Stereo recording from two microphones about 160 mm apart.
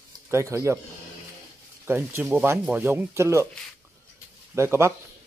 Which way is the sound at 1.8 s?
15° right (ahead or behind).